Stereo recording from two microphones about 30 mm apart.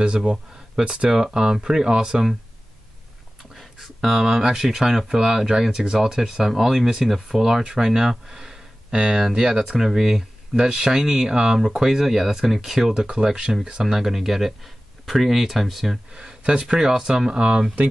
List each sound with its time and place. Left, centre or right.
1.0 s speech: centre
3.8 s speech: centre
4.6 s speech: centre
10.5 s speech: right
12.9 s speech: right; by 16.0 s centre
16.1 s speech: right